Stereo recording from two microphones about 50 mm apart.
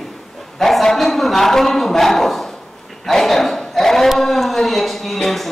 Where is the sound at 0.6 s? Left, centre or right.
Centre.